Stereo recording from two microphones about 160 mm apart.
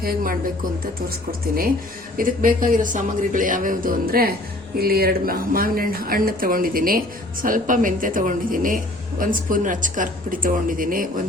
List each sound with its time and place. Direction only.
0.0 s a woman's voice: 60° right (ahead or behind)
2.1 s a woman's voice: 60° right (ahead or behind)